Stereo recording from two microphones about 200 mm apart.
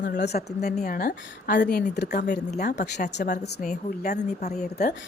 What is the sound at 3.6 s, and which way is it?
A woman's voice, 35° left (ahead or behind).